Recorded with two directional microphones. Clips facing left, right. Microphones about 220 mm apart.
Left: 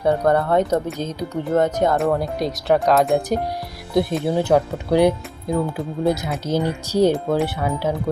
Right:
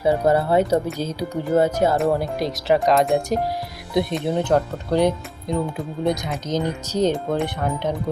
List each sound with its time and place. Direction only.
0.0 s speech: 5° right (ahead or behind)